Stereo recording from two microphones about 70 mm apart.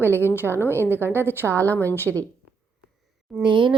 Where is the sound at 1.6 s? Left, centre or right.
Left.